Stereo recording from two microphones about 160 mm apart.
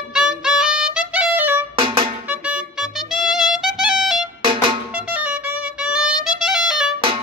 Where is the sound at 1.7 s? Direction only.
35° right (ahead or behind).